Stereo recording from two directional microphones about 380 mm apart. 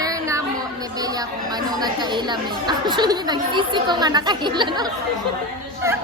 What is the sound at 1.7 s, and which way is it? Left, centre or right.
Speech, centre.